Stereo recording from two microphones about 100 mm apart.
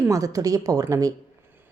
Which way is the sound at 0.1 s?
35° right (ahead or behind).